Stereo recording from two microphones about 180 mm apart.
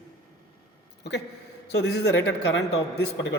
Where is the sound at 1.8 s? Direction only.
65° left (ahead or behind).